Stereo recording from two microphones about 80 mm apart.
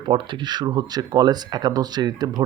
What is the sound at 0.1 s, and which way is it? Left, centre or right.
Speech, right.